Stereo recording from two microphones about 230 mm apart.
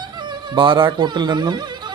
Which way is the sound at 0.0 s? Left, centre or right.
Centre.